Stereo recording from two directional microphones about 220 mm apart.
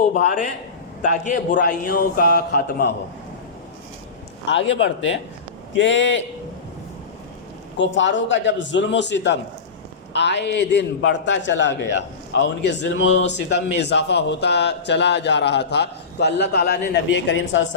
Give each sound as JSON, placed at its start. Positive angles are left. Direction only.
{"t": 0.0, "sound": "a man's voice", "side_deg": 35}
{"t": 4.4, "sound": "a man's voice", "side_deg": 55}
{"t": 7.8, "sound": "a man's voice", "side_deg": 55}